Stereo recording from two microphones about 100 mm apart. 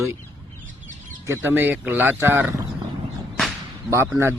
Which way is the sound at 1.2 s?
25° right (ahead or behind).